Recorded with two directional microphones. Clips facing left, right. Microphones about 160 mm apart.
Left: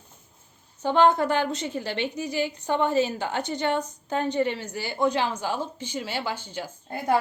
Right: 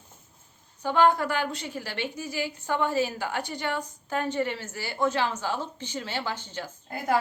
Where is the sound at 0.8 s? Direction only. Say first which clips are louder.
Left 2 dB; 25° left (ahead or behind).